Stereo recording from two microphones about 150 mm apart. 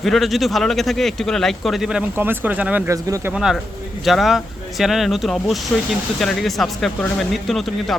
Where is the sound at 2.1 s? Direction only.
15° right (ahead or behind).